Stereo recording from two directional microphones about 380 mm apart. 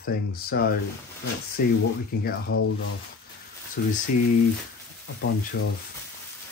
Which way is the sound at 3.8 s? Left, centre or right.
Left.